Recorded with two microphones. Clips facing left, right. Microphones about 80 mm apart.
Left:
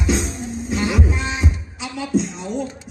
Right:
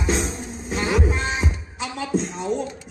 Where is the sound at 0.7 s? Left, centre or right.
Right.